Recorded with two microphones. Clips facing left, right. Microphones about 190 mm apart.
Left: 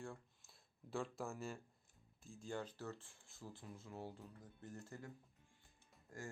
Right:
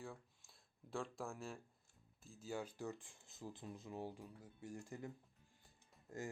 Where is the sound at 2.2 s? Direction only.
5° right (ahead or behind).